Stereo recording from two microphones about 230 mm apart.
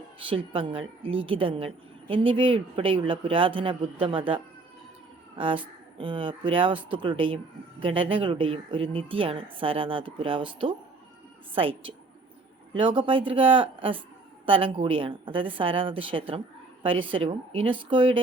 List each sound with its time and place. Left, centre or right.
0.2 s speech: right
5.4 s speech: right